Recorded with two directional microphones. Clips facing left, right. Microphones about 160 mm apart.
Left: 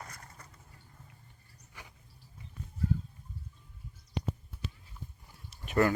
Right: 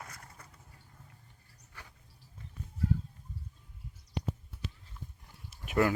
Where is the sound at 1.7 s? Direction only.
15° left (ahead or behind).